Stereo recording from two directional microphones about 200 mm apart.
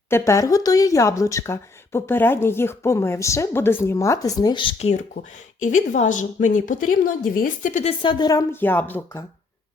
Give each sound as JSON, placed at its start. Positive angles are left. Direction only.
{"t": 0.1, "sound": "speech", "side_deg": 15}
{"t": 5.6, "sound": "a woman's voice", "side_deg": 40}
{"t": 8.0, "sound": "speech", "side_deg": 20}